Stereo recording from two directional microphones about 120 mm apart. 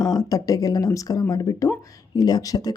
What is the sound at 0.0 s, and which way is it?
Speech, 30° left (ahead or behind).